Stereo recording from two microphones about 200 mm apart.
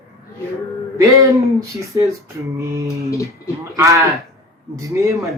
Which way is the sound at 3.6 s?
15° right (ahead or behind).